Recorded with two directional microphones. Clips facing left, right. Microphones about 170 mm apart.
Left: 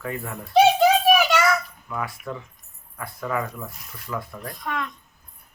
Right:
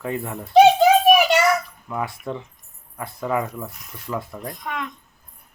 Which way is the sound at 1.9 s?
25° right (ahead or behind).